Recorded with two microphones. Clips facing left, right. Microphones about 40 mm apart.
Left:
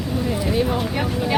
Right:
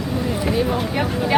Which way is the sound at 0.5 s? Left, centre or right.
Centre.